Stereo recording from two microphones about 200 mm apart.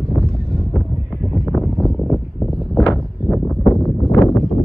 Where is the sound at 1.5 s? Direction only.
Centre (ahead or behind); by 4.4 s 15° left (ahead or behind).